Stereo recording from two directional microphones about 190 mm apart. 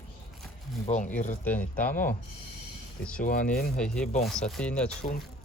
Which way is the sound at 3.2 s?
45° left (ahead or behind).